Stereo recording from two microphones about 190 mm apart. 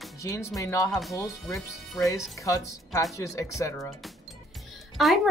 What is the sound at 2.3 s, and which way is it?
Speech, 15° left (ahead or behind).